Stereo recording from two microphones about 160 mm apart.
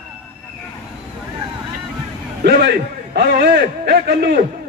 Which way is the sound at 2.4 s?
90° right.